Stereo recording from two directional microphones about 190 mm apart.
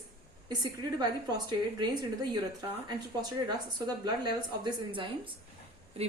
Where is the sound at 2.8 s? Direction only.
20° right (ahead or behind).